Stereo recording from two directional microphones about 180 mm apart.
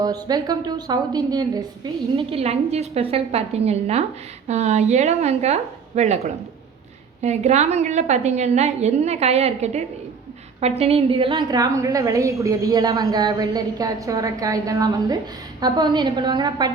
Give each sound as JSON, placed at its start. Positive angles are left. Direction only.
{"t": 0.0, "sound": "a woman's voice", "side_deg": -20}
{"t": 2.1, "sound": "a woman's voice", "side_deg": -35}
{"t": 11.3, "sound": "a woman's voice", "side_deg": -20}